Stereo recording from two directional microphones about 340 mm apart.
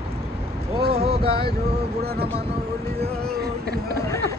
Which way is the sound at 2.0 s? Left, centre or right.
Right.